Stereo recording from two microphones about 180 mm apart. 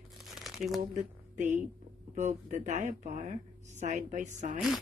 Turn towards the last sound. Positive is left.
turn(degrees=-45)  # may be behind; listen again after turning